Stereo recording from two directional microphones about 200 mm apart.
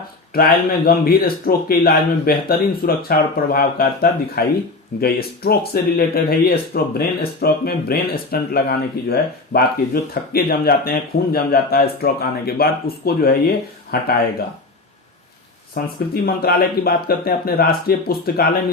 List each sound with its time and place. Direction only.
0.3 s speech: 50° left (ahead or behind)
15.7 s speech: 50° left (ahead or behind)